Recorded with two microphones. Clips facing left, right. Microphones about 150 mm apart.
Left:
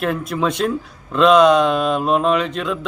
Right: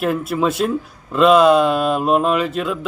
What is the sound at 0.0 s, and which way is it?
Speech, 5° right (ahead or behind).